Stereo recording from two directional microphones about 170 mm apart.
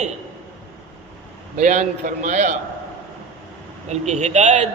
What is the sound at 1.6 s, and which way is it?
Speech, 45° right (ahead or behind).